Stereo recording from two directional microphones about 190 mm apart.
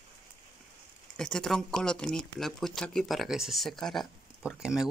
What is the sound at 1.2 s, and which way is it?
Speech, 5° left (ahead or behind).